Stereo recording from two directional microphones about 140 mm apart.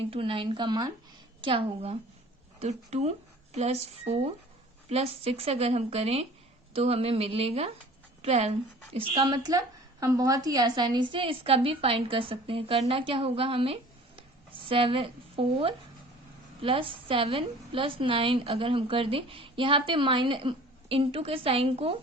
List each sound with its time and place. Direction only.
0.0 s a woman's voice: 40° right (ahead or behind)
14.2 s a sound: 40° right (ahead or behind)
16.6 s a woman's voice: 40° right (ahead or behind)